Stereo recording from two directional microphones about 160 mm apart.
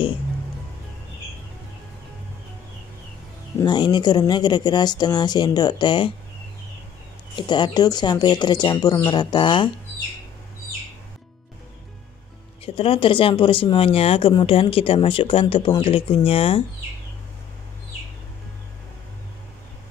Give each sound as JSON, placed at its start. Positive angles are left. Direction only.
{"t": 3.6, "sound": "speech", "side_deg": 25}
{"t": 7.3, "sound": "speech", "side_deg": 30}
{"t": 12.6, "sound": "speech", "side_deg": 35}